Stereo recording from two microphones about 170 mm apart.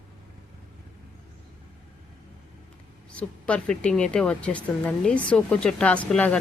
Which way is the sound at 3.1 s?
5° left (ahead or behind).